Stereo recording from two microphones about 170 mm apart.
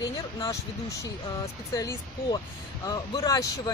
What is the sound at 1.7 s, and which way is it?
Speech, 20° left (ahead or behind).